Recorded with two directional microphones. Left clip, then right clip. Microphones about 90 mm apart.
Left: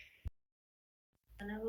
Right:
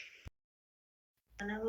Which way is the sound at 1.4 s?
20° right (ahead or behind).